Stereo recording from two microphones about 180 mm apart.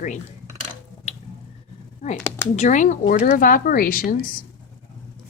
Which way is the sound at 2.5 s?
45° left (ahead or behind).